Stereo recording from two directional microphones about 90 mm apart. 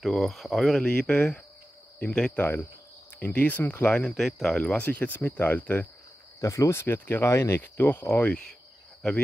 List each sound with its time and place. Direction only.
0.0 s speech: centre (ahead or behind); by 3.9 s 20° left (ahead or behind)
3.9 s speech: 10° left (ahead or behind)
6.4 s speech: 35° left (ahead or behind)